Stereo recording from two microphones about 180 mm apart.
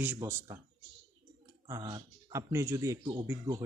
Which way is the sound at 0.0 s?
10° right (ahead or behind).